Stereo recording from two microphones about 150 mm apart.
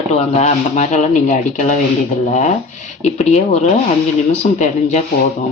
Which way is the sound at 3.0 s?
45° left (ahead or behind).